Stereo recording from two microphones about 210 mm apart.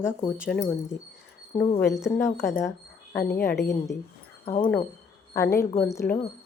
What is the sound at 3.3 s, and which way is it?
Speech, 10° left (ahead or behind).